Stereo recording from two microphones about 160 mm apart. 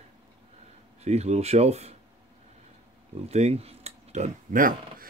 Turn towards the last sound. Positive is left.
turn(degrees=-60)  # may be behind; listen again after turning